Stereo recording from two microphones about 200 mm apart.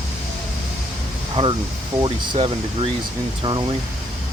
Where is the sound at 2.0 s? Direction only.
25° right (ahead or behind).